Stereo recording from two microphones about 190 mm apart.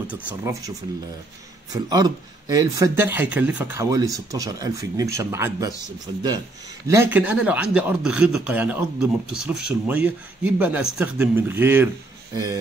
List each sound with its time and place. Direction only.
0.3 s speech: 15° right (ahead or behind)
6.9 s speech: 10° right (ahead or behind)